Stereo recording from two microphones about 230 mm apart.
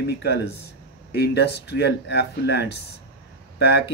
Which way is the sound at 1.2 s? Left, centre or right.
Left.